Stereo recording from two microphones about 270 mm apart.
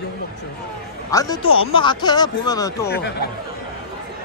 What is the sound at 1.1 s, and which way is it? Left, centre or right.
Speech, centre.